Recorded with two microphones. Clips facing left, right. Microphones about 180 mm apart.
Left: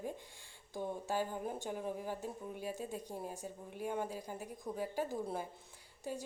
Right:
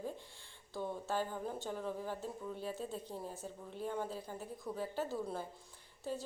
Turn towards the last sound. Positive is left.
turn(degrees=15)  # may be behind; listen again after turning